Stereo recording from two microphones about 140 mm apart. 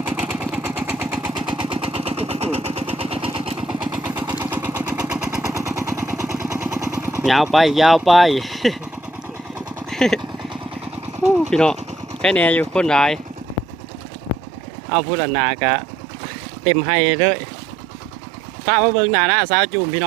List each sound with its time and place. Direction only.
0.1 s vehicle: 10° right (ahead or behind)
1.5 s vehicle: 35° right (ahead or behind)
3.9 s vehicle: 10° right (ahead or behind)
5.5 s vehicle: 20° right (ahead or behind)
6.2 s vehicle: 5° right (ahead or behind)
6.7 s vehicle: 15° right (ahead or behind)
7.3 s speech: centre (ahead or behind)
9.9 s vehicle: 5° left (ahead or behind)
11.5 s speech: 5° left (ahead or behind)
14.8 s speech: 5° left (ahead or behind)
18.6 s speech: 5° right (ahead or behind)